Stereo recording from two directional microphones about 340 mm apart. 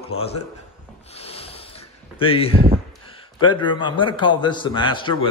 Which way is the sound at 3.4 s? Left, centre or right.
Centre.